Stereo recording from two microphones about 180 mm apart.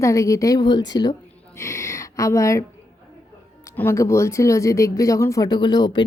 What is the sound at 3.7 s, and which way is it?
Speech, 15° left (ahead or behind).